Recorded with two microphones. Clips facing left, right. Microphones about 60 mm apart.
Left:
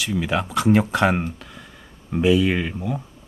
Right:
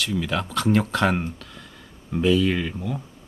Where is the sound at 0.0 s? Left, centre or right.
Centre.